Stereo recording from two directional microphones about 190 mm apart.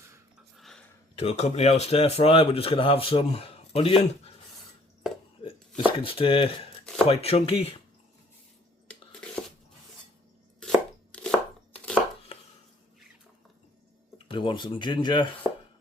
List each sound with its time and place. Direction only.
0.5 s a sound: centre (ahead or behind)
1.1 s speech: 35° left (ahead or behind)
5.4 s a sound: 30° left (ahead or behind)
7.1 s speech: 30° left (ahead or behind)
10.6 s chopping: 5° left (ahead or behind)
14.3 s speech: 25° left (ahead or behind)